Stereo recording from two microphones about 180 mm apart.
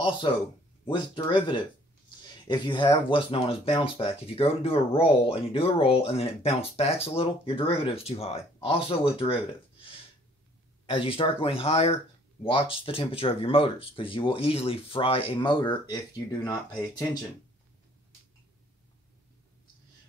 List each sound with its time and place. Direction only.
0.3 s speech: 30° left (ahead or behind)
10.9 s speech: 30° left (ahead or behind)